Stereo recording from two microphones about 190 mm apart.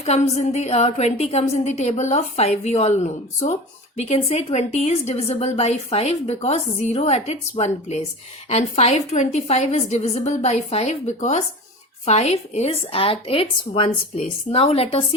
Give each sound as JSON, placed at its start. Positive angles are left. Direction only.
{"t": 0.0, "sound": "a woman's voice", "side_deg": 35}